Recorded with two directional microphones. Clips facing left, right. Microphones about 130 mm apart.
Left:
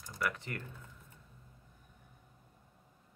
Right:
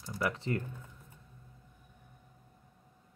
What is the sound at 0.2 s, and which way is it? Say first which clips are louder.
Speech: right 5 dB; 25° right (ahead or behind).